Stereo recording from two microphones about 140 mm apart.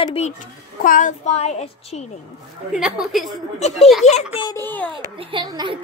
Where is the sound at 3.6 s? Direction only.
50° left (ahead or behind).